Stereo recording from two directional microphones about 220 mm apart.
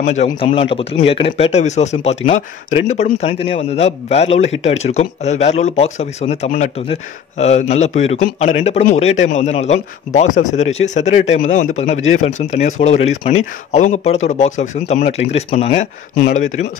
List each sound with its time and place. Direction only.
0.0 s speech: 30° left (ahead or behind)